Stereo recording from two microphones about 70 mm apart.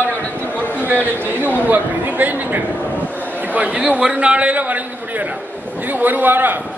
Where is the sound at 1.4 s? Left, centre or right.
Right.